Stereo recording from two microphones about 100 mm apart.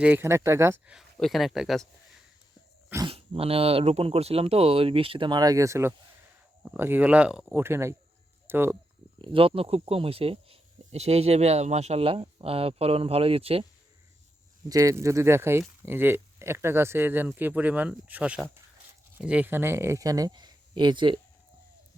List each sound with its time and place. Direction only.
0.0 s speech: 15° right (ahead or behind)
0.3 s speech: 30° right (ahead or behind)
1.2 s speech: centre (ahead or behind)
3.1 s speech: 75° right (ahead or behind); by 5.4 s 60° right (ahead or behind)
5.4 s speech: 35° right (ahead or behind)
6.6 s speech: 20° right (ahead or behind)
7.5 s speech: 25° right (ahead or behind)
9.2 s speech: 65° right (ahead or behind)
14.7 s speech: 35° right (ahead or behind); by 21.2 s 55° right (ahead or behind)